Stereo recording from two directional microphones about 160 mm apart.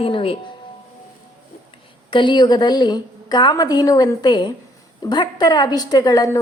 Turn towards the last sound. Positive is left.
turn(degrees=20)  # may be behind; listen again after turning